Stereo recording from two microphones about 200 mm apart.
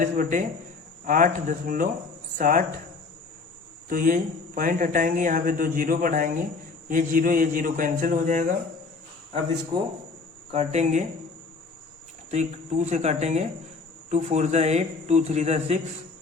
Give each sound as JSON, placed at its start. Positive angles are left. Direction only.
{"t": 0.0, "sound": "a man's voice", "side_deg": -40}
{"t": 3.8, "sound": "a man's voice", "side_deg": -45}
{"t": 10.5, "sound": "a man's voice", "side_deg": -35}
{"t": 12.3, "sound": "a man's voice", "side_deg": -35}